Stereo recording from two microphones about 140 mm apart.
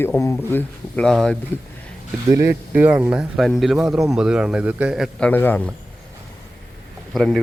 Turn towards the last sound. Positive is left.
turn(degrees=5)  # may be behind; listen again after turning